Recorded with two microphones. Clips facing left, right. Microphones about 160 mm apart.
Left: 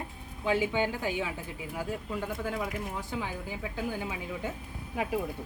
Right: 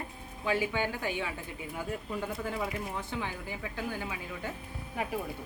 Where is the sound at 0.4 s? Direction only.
20° left (ahead or behind).